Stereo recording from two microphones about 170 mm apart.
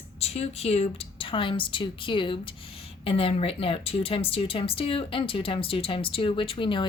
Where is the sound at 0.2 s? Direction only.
35° left (ahead or behind).